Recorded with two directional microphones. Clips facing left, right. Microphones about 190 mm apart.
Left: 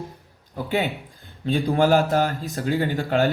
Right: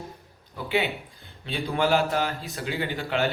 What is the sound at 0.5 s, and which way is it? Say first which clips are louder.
Speech: left 2 dB; 45° left (ahead or behind).